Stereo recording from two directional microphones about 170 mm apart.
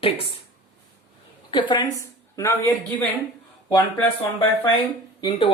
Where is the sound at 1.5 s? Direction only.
25° left (ahead or behind).